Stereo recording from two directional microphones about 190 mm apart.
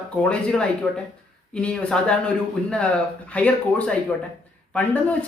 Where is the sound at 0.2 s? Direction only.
5° left (ahead or behind).